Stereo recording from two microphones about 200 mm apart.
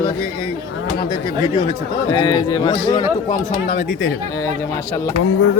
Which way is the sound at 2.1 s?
25° left (ahead or behind).